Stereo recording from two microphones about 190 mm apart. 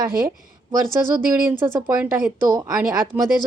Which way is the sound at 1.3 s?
10° right (ahead or behind).